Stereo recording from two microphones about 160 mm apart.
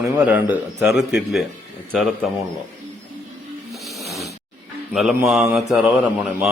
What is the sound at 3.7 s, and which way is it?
Snake, centre (ahead or behind).